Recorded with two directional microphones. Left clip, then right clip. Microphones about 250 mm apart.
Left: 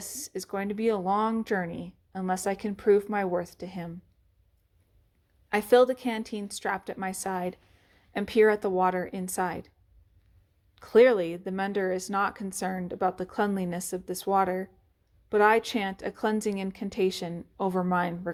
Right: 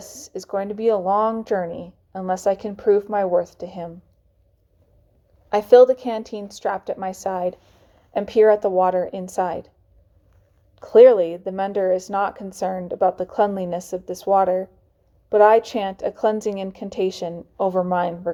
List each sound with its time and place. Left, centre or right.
0.0 s a woman's voice: left
5.5 s a woman's voice: left
10.8 s a woman's voice: left